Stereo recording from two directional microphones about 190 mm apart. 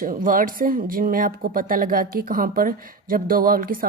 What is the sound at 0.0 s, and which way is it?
A woman's voice, 45° right (ahead or behind).